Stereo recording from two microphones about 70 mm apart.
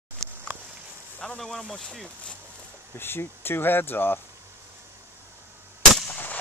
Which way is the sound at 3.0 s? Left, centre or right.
Left.